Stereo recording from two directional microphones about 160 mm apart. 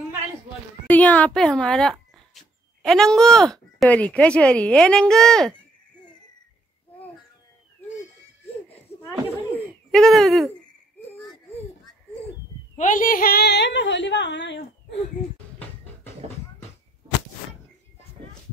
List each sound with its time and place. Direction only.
0.8 s speech: 10° left (ahead or behind)
9.9 s speech: centre (ahead or behind)
12.7 s a woman's voice: 55° left (ahead or behind); by 15.0 s 90° left